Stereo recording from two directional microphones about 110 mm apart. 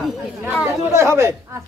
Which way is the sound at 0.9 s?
25° right (ahead or behind).